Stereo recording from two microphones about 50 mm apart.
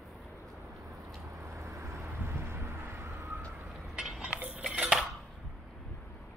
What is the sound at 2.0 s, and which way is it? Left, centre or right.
Vehicle, right.